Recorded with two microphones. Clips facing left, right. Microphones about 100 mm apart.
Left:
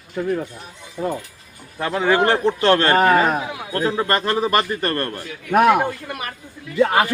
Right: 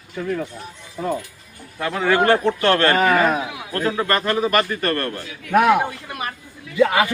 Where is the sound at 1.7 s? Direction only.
20° left (ahead or behind).